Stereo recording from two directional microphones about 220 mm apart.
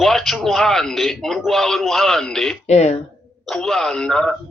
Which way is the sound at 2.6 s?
30° left (ahead or behind).